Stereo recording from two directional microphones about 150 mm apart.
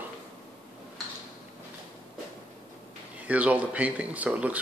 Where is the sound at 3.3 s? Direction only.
10° right (ahead or behind).